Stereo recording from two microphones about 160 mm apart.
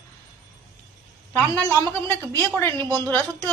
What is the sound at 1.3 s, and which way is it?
A woman's voice, 15° left (ahead or behind).